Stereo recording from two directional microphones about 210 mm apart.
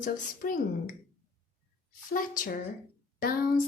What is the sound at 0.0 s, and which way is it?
Speech, 40° left (ahead or behind).